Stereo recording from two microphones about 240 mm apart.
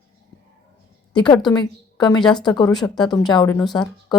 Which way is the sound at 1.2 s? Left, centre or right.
Centre.